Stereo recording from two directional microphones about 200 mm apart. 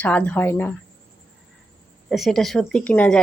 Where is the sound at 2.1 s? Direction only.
Centre (ahead or behind).